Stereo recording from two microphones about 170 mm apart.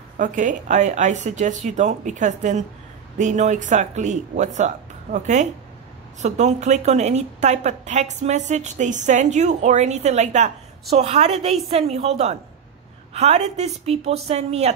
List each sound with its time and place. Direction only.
0.2 s a woman's voice: 50° right (ahead or behind)